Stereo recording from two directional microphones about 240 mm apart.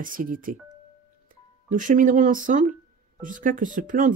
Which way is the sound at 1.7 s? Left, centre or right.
Right.